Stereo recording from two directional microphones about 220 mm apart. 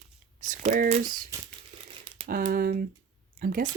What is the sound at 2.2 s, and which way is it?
Speech, 40° right (ahead or behind).